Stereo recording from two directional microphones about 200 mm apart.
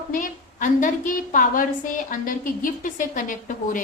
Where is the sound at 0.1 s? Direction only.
40° left (ahead or behind).